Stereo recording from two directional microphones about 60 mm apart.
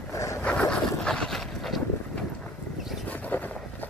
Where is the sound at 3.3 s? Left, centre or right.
Left.